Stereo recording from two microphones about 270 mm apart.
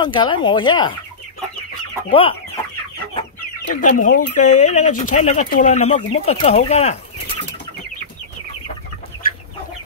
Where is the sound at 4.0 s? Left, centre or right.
Left.